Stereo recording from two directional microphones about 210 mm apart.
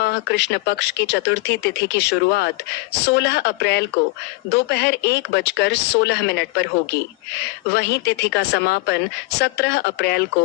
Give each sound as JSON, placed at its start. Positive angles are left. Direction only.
{"t": 0.0, "sound": "speech", "side_deg": 55}
{"t": 7.7, "sound": "speech", "side_deg": 55}